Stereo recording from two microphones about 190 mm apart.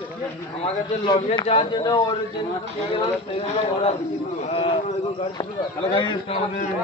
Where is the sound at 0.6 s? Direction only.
30° left (ahead or behind).